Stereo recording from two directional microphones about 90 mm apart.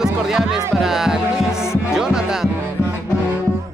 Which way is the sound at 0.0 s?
5° right (ahead or behind).